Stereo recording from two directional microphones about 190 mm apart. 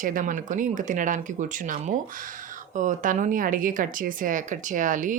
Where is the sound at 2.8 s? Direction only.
40° right (ahead or behind).